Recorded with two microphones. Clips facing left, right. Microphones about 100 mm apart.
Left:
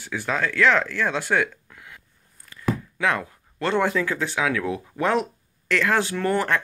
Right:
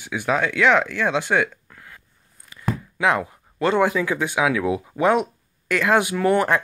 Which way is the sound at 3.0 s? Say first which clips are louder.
Right 5 dB; 15° right (ahead or behind).